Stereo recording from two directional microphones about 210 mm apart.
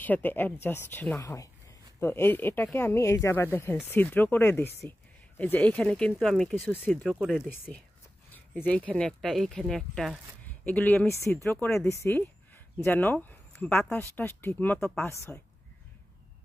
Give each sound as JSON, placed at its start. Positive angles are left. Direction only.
{"t": 0.0, "sound": "speech", "side_deg": 10}